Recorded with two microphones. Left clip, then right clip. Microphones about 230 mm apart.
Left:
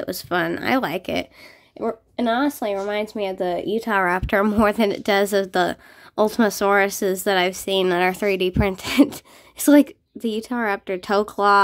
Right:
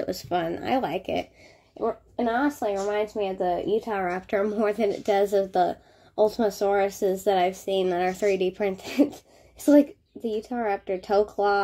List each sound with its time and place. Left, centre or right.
0.0 s a woman's voice: centre